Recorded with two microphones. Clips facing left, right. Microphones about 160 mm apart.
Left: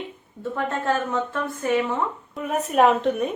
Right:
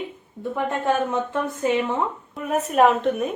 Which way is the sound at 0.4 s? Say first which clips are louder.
Right 2 dB; 15° right (ahead or behind).